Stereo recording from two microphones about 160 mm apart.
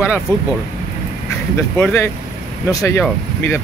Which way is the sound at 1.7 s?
15° left (ahead or behind).